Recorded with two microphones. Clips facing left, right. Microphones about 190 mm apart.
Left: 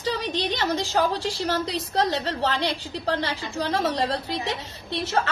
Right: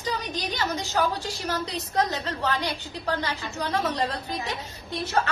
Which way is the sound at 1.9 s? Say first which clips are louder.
Left 2 dB; 30° left (ahead or behind).